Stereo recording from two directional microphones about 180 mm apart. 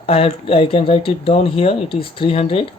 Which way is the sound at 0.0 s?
35° left (ahead or behind).